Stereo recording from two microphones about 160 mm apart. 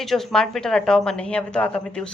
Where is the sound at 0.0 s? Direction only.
Centre (ahead or behind).